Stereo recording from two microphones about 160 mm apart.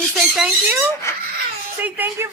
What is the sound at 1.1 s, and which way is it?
Crying, 20° left (ahead or behind).